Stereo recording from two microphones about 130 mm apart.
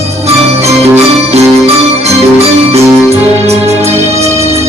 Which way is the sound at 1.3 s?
55° right (ahead or behind).